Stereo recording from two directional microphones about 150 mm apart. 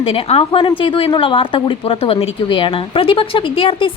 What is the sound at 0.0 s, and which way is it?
A woman's voice, 40° left (ahead or behind).